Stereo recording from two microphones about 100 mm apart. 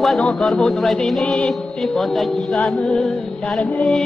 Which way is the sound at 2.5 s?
10° left (ahead or behind).